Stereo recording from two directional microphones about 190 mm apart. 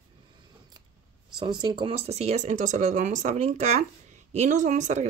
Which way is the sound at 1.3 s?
25° right (ahead or behind).